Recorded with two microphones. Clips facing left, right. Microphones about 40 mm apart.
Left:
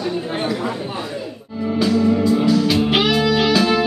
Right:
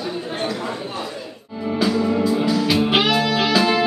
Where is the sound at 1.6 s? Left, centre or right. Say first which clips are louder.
Left 3 dB; centre.